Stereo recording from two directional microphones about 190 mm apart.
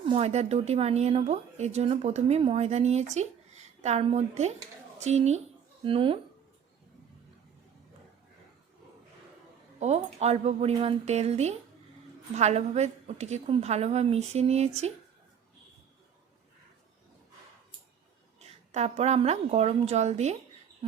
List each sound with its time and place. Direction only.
0.0 s speech: 30° right (ahead or behind)
9.8 s speech: 35° right (ahead or behind)
18.3 s a woman's voice: 35° right (ahead or behind)